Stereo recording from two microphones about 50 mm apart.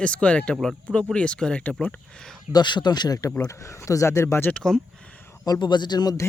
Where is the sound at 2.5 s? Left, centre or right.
Right.